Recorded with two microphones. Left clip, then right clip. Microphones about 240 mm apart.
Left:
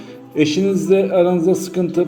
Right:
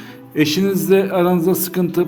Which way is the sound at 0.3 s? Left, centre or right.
Right.